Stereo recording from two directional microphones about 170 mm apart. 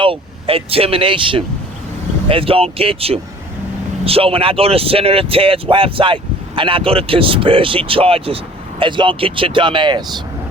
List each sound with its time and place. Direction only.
0.0 s speech: 35° right (ahead or behind)